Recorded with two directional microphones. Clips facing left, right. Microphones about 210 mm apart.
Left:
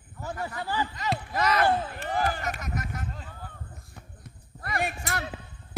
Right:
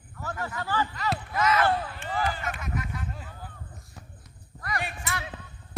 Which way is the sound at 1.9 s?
45° left (ahead or behind).